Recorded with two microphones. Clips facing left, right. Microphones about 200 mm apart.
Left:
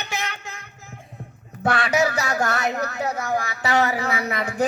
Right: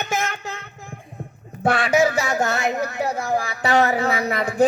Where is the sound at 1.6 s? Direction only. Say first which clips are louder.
Right 3 dB; 25° right (ahead or behind).